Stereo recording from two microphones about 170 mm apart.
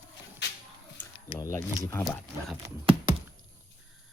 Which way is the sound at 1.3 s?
20° left (ahead or behind).